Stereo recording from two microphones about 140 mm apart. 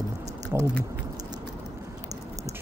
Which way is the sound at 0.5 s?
15° right (ahead or behind).